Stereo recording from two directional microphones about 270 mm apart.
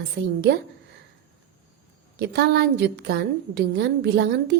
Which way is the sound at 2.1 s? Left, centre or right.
Right.